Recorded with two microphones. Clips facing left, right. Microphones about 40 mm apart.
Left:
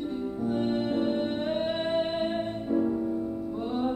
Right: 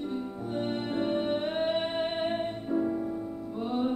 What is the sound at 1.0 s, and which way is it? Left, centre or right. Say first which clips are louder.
Music: left 1 dB; centre.